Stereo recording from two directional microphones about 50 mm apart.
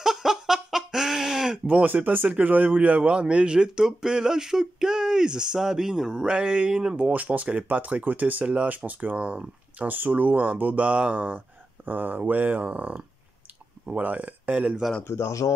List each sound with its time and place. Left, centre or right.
0.0 s a sound: centre
1.9 s speech: right; by 7.0 s centre
7.0 s speech: right
15.0 s speech: left